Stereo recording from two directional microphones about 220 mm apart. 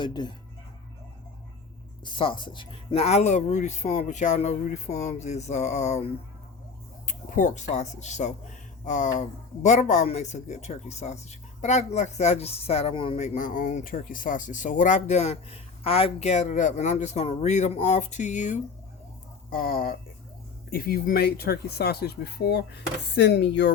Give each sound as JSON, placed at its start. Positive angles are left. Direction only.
{"t": 0.0, "sound": "speech", "side_deg": 20}
{"t": 2.0, "sound": "speech", "side_deg": 20}
{"t": 7.1, "sound": "speech", "side_deg": 35}